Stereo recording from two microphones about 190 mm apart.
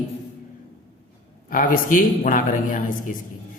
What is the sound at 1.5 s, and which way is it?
Mantra, 45° left (ahead or behind).